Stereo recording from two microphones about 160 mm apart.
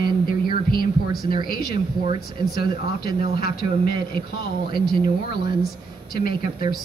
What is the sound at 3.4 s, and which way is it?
Speech, 65° left (ahead or behind).